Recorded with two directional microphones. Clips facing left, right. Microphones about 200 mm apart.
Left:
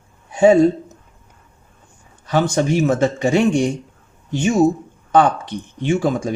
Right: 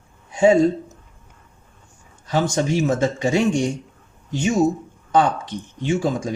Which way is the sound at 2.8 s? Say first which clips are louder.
Left 3 dB; 60° left (ahead or behind).